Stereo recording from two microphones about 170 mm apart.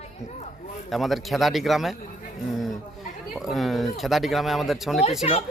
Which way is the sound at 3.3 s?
Centre (ahead or behind).